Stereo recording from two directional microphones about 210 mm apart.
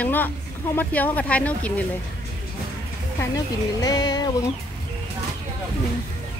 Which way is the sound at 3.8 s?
20° left (ahead or behind).